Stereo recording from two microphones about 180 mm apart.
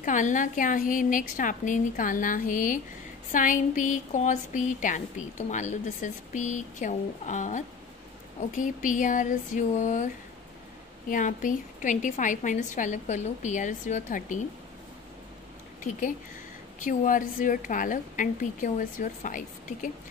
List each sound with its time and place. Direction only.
0.0 s speech: 45° left (ahead or behind)
11.1 s speech: 45° left (ahead or behind)
16.8 s speech: 45° left (ahead or behind)